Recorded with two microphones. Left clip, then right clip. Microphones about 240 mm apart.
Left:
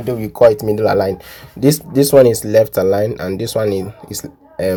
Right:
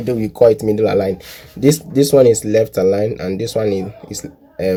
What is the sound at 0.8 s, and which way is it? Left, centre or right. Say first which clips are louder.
Speech: left 1 dB; centre.